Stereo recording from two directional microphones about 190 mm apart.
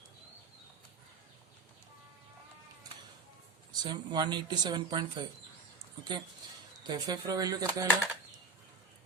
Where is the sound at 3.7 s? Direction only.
20° right (ahead or behind).